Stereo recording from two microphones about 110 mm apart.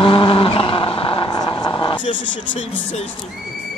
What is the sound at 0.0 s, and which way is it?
Vehicle, 50° left (ahead or behind).